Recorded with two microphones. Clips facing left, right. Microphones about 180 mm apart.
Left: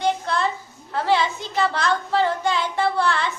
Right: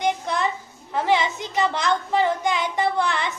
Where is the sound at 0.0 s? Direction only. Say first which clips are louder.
Left 1 dB; 15° right (ahead or behind).